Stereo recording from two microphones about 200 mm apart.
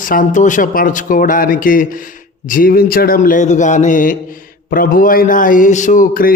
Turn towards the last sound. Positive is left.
turn(degrees=45)  # may be behind; listen again after turning